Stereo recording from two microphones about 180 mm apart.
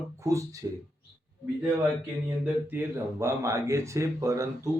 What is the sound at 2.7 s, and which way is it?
Speech, 15° right (ahead or behind).